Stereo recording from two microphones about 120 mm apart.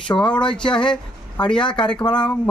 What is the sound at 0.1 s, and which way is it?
Speech, 5° left (ahead or behind).